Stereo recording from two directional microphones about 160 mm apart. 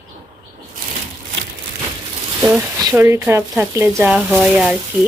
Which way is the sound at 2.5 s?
20° right (ahead or behind).